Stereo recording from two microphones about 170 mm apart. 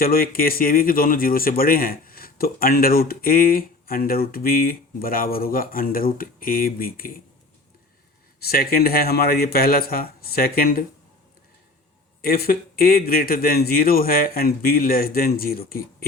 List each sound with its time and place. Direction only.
0.0 s speech: 60° left (ahead or behind)
8.4 s speech: 65° left (ahead or behind)
12.2 s speech: 60° left (ahead or behind)